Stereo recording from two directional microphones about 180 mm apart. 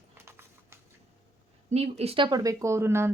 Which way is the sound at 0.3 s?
15° right (ahead or behind).